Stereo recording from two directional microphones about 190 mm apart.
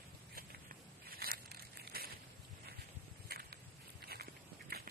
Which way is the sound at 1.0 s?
50° right (ahead or behind).